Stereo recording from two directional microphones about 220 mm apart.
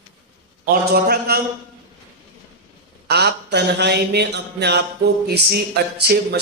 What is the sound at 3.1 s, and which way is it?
Speech, 50° right (ahead or behind).